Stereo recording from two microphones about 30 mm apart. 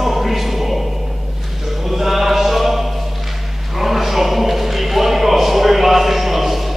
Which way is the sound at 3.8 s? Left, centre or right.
Centre.